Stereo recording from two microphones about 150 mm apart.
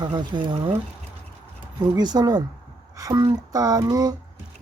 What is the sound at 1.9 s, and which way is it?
Speech, 25° right (ahead or behind).